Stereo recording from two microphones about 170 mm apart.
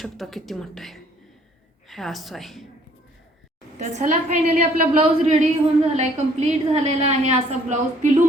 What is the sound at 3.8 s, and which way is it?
Speech, 45° right (ahead or behind).